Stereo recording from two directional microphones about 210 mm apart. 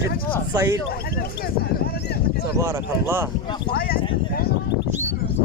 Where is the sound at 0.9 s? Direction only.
50° left (ahead or behind).